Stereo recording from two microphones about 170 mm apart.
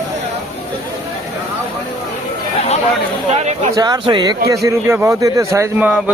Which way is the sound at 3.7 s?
25° right (ahead or behind).